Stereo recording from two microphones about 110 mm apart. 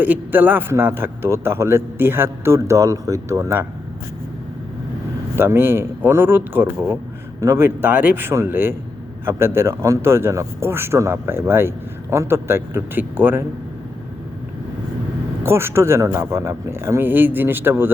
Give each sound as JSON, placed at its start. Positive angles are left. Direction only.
{"t": 0.0, "sound": "a man's voice", "side_deg": -15}
{"t": 5.4, "sound": "a man's voice", "side_deg": -20}
{"t": 15.4, "sound": "a man's voice", "side_deg": -20}